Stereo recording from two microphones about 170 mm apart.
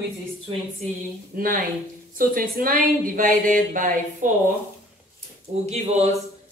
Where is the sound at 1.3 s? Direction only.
60° right (ahead or behind).